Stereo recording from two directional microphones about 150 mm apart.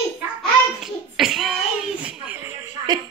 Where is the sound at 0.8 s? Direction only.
Centre (ahead or behind).